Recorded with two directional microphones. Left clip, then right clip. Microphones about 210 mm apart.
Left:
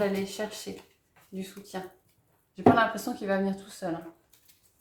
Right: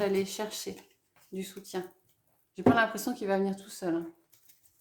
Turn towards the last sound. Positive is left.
turn(degrees=-35)  # may be behind; listen again after turning